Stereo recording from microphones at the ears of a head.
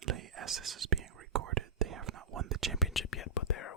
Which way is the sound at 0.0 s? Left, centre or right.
Right.